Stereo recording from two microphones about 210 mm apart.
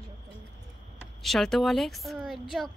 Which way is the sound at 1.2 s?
Centre (ahead or behind).